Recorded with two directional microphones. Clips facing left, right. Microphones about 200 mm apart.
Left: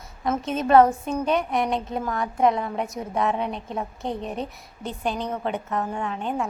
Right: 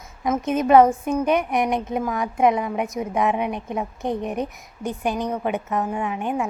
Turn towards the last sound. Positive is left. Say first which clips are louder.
# right 3 dB
turn(degrees=-10)  # may be behind; listen again after turning